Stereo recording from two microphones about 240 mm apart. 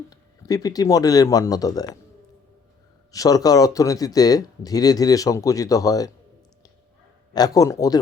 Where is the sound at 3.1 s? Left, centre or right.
Centre.